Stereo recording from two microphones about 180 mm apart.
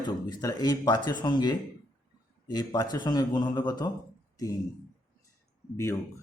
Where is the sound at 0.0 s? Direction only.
25° left (ahead or behind).